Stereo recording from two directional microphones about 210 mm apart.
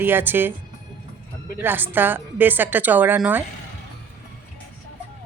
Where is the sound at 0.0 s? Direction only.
10° right (ahead or behind).